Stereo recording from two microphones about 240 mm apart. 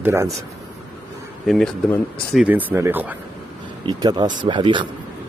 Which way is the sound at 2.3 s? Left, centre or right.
Centre.